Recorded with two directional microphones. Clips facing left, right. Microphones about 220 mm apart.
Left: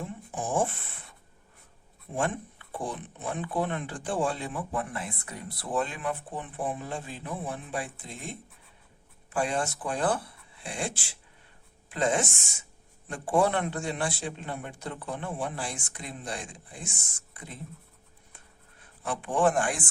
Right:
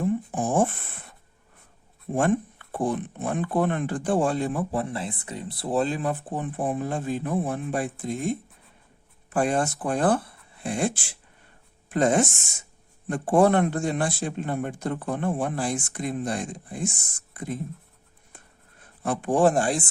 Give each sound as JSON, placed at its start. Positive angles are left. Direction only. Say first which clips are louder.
{"t": 0.3, "sound": "speech", "louder": "right 5 dB", "side_deg": -50}
{"t": 2.1, "sound": "a man's voice", "louder": "right 8 dB", "side_deg": -50}
{"t": 4.7, "sound": "a man's voice", "louder": "right 5 dB", "side_deg": -30}
{"t": 9.3, "sound": "a man's voice", "louder": "right 5 dB", "side_deg": -45}
{"t": 19.0, "sound": "speech", "louder": "right 5 dB", "side_deg": -45}